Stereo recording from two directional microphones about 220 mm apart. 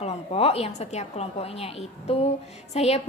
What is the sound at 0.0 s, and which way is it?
A woman's voice, 25° left (ahead or behind).